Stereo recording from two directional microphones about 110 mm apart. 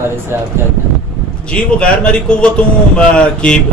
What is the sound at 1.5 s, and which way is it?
A man's voice, 10° left (ahead or behind).